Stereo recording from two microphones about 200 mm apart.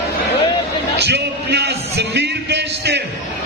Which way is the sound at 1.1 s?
55° right (ahead or behind).